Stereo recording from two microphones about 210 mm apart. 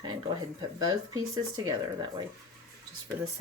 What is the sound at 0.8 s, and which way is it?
Speech, 20° right (ahead or behind).